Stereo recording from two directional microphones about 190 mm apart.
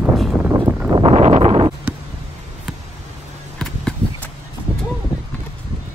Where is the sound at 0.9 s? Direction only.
30° right (ahead or behind).